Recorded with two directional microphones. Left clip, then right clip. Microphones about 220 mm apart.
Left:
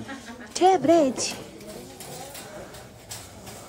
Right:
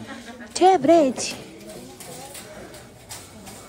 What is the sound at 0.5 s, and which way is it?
Speech, 10° left (ahead or behind).